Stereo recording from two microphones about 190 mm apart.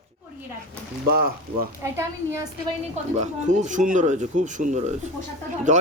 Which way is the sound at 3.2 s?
40° right (ahead or behind).